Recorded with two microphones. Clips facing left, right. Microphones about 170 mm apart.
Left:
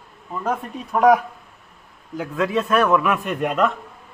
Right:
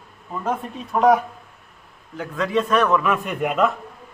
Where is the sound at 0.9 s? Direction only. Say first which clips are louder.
Left 1 dB; 5° left (ahead or behind).